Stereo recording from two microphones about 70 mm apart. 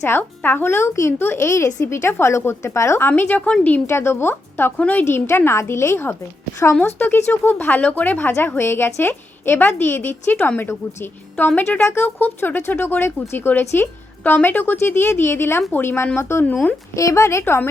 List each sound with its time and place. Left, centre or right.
0.0 s a woman's voice: left
3.1 s speech: left
3.8 s a woman's voice: left
4.8 s speech: left
5.0 s a woman's voice: left
8.5 s a woman's voice: left
16.9 s a woman's voice: left
17.4 s speech: left